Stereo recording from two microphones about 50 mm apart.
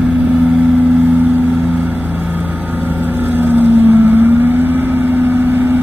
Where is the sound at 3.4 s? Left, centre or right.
Right.